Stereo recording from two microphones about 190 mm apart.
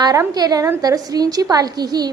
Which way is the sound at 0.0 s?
20° right (ahead or behind).